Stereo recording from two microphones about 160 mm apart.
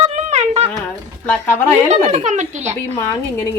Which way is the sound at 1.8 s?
45° right (ahead or behind).